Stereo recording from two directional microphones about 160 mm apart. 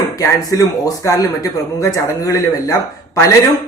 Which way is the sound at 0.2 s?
20° left (ahead or behind).